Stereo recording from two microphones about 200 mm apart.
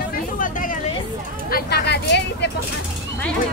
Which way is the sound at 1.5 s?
55° left (ahead or behind).